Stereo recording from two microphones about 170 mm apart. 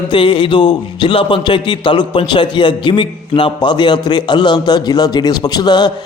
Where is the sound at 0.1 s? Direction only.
30° left (ahead or behind).